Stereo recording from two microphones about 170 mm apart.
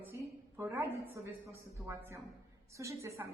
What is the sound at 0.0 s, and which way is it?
A woman's voice, 10° right (ahead or behind).